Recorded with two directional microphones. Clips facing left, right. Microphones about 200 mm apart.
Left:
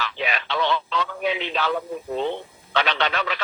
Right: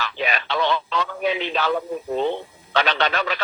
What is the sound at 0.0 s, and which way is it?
Speech, 45° right (ahead or behind).